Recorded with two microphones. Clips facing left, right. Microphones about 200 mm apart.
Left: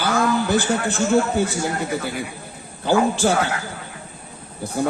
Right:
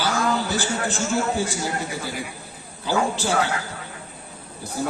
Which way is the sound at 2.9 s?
55° left (ahead or behind).